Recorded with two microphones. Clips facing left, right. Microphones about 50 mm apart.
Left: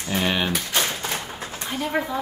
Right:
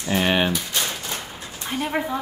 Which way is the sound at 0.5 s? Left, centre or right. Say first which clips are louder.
Left 2 dB; left.